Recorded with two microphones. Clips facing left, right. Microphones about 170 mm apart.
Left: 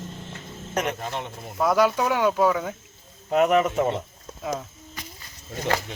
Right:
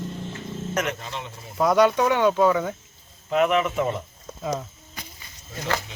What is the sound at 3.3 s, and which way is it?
Speech, 40° left (ahead or behind).